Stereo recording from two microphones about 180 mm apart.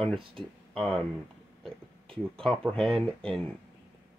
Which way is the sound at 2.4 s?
5° left (ahead or behind).